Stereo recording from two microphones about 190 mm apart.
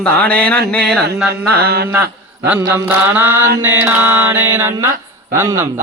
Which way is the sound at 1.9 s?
10° right (ahead or behind).